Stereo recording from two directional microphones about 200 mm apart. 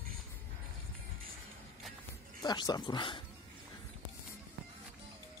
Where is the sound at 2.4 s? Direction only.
20° left (ahead or behind).